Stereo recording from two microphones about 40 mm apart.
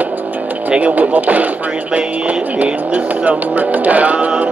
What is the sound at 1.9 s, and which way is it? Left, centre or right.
Music, right.